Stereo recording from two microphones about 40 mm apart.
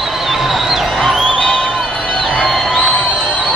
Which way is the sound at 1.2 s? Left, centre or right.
Centre.